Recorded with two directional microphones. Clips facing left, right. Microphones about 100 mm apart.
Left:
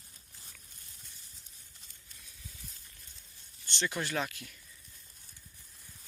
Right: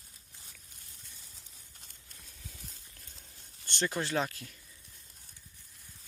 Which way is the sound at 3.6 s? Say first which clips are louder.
Right 2 dB; 50° right (ahead or behind).